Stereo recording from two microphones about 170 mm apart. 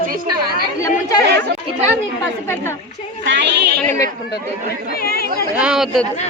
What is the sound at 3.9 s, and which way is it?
Speech, 20° left (ahead or behind).